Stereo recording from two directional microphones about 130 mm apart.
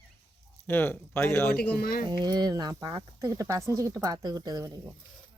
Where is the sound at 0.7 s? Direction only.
15° left (ahead or behind).